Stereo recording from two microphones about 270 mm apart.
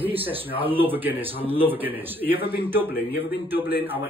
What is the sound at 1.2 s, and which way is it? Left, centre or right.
Speech, centre.